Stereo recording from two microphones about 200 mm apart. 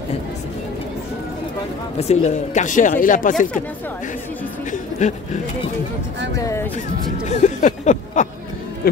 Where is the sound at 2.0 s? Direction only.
35° left (ahead or behind).